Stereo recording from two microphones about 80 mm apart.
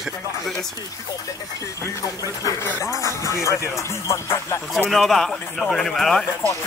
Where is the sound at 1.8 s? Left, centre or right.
Left.